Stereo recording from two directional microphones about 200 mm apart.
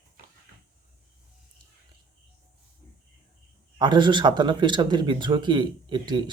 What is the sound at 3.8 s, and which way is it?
Speech, 25° right (ahead or behind).